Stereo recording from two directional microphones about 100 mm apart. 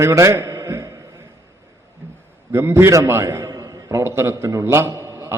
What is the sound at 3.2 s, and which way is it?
A man's voice, 35° right (ahead or behind).